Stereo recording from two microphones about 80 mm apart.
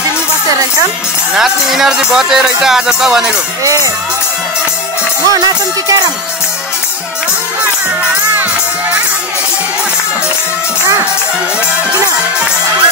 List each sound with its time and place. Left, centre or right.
1.3 s speech: centre
3.6 s music: right
5.3 s music: right